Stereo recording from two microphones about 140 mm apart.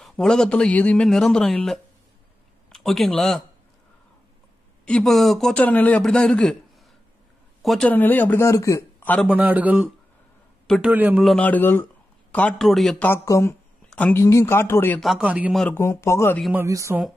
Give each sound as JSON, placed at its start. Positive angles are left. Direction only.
{"t": 0.0, "sound": "a man's voice", "side_deg": 5}
{"t": 4.8, "sound": "a man's voice", "side_deg": 5}
{"t": 7.6, "sound": "a man's voice", "side_deg": 0}
{"t": 7.9, "sound": "a man's voice", "side_deg": 10}
{"t": 9.3, "sound": "speech", "side_deg": -10}
{"t": 11.2, "sound": "a man's voice", "side_deg": 10}
{"t": 13.0, "sound": "a man's voice", "side_deg": 20}
{"t": 15.0, "sound": "speech", "side_deg": -5}
{"t": 15.7, "sound": "speech", "side_deg": 20}
{"t": 16.5, "sound": "speech", "side_deg": -20}